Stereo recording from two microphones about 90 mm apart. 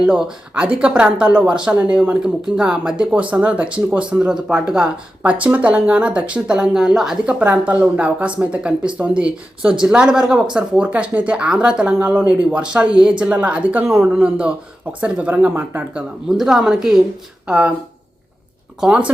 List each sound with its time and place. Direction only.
0.0 s speech: 5° right (ahead or behind)
13.8 s speech: 30° right (ahead or behind)
14.1 s speech: 15° right (ahead or behind)
16.3 s a woman's voice: 5° right (ahead or behind)
18.8 s speech: 10° right (ahead or behind)